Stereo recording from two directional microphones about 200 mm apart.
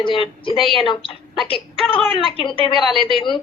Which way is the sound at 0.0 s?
25° left (ahead or behind).